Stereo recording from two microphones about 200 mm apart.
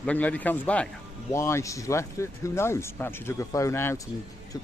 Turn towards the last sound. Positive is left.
turn(degrees=10)  # may be behind; listen again after turning